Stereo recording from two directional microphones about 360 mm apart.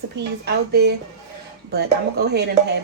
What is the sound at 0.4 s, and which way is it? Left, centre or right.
Speech, right.